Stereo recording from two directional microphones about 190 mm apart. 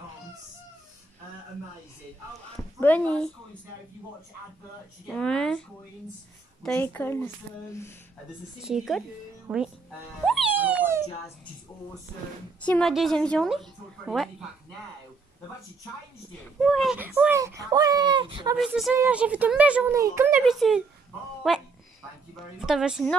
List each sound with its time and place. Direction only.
2.5 s a sound: 10° left (ahead or behind)
5.0 s a woman's voice: 5° left (ahead or behind)
6.6 s a woman's voice: 10° left (ahead or behind)
8.5 s a woman's voice: 5° right (ahead or behind)
12.6 s a woman's voice: 5° left (ahead or behind)
16.5 s speech: centre (ahead or behind); by 18.5 s 25° right (ahead or behind)
18.6 s a woman's voice: centre (ahead or behind)
20.4 s a woman's voice: centre (ahead or behind)